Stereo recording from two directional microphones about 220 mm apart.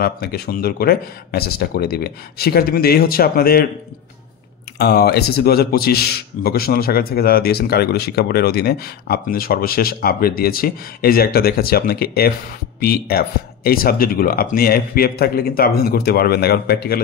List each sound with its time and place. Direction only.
0.0 s speech: 45° left (ahead or behind)
4.7 s speech: 45° left (ahead or behind)